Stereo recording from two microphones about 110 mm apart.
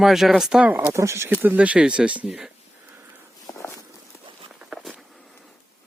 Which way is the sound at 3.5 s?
35° left (ahead or behind).